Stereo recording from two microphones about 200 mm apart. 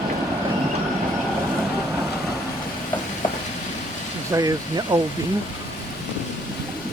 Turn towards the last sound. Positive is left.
turn(degrees=-20)  # may be behind; listen again after turning